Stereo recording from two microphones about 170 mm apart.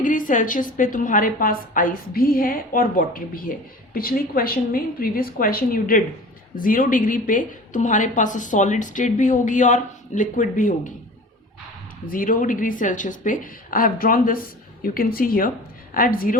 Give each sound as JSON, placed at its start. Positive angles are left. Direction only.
{"t": 0.0, "sound": "a woman's voice", "side_deg": 50}
{"t": 12.0, "sound": "a woman's voice", "side_deg": 55}